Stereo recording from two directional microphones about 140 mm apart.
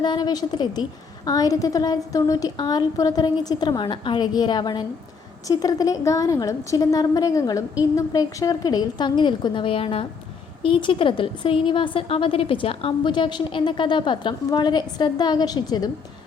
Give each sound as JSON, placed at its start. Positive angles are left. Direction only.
{"t": 0.0, "sound": "a woman's voice", "side_deg": 30}